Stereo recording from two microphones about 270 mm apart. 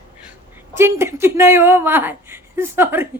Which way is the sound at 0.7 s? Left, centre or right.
Centre.